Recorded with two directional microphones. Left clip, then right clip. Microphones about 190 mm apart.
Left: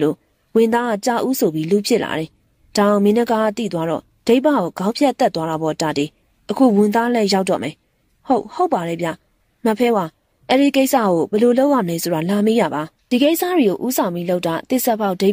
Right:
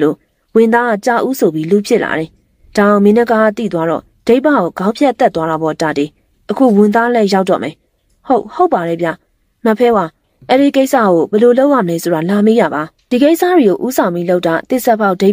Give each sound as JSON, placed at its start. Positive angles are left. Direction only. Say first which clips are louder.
{"t": 0.0, "sound": "speech", "louder": "right 5 dB", "side_deg": 35}